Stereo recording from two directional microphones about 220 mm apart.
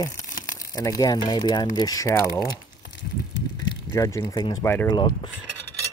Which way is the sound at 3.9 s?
15° left (ahead or behind).